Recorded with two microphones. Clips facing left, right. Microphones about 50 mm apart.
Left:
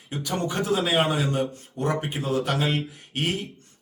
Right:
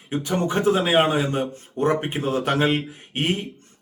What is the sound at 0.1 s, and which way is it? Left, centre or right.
Speech, right.